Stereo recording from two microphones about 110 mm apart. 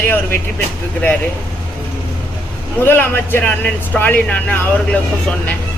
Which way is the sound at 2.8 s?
20° left (ahead or behind).